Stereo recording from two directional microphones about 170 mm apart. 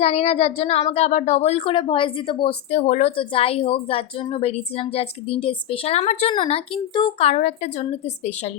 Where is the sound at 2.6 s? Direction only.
45° left (ahead or behind).